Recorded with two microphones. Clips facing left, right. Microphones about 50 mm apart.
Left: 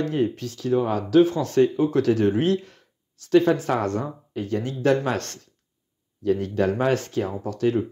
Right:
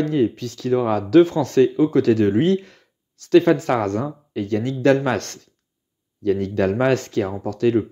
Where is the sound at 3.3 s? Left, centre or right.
Right.